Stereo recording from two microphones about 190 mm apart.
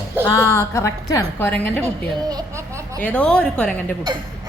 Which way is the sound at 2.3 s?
15° right (ahead or behind).